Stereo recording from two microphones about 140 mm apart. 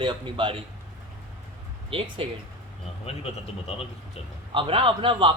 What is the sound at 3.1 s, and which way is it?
Speech, 45° left (ahead or behind).